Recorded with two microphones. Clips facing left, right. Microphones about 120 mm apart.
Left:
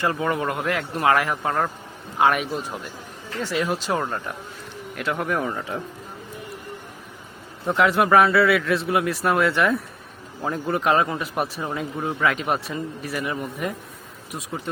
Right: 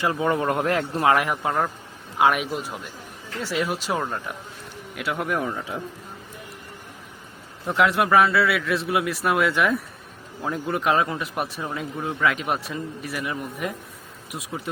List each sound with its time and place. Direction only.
0.0 s speech: 10° right (ahead or behind)
0.3 s speech: 30° right (ahead or behind)
0.9 s speech: 20° right (ahead or behind)
2.1 s a man's voice: 5° right (ahead or behind)
7.7 s a man's voice: centre (ahead or behind)